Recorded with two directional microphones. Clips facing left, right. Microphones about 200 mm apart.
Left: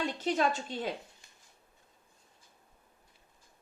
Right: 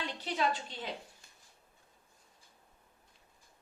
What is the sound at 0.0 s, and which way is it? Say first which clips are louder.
Speech: left 5 dB; 45° left (ahead or behind).